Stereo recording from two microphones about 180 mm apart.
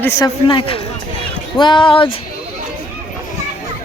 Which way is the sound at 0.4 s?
30° left (ahead or behind).